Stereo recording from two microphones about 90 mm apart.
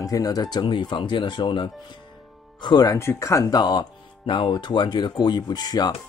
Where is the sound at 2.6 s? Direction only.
45° left (ahead or behind).